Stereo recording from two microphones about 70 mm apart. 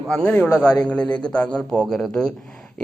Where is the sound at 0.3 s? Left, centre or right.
Left.